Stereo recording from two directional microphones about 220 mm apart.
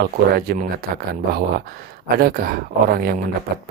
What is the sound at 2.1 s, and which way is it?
Speech, 40° right (ahead or behind).